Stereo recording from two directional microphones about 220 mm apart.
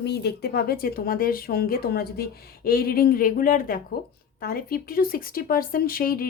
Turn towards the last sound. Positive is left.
turn(degrees=40)  # may be behind; listen again after turning